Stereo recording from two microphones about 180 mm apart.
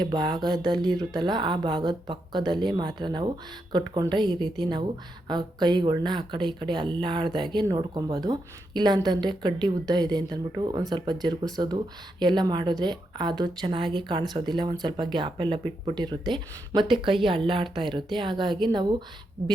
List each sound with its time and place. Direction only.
0.0 s speech: 25° right (ahead or behind)